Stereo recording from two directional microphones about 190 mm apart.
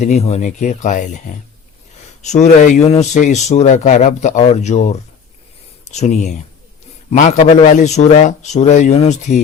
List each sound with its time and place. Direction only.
0.0 s a man's voice: 35° left (ahead or behind)
2.2 s a man's voice: 35° left (ahead or behind)